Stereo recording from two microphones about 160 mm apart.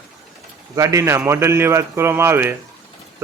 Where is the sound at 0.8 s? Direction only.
20° right (ahead or behind).